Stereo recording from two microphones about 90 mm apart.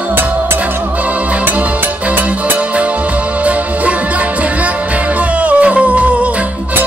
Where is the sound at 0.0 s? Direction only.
20° right (ahead or behind).